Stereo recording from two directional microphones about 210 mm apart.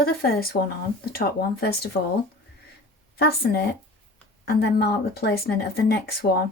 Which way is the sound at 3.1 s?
50° left (ahead or behind).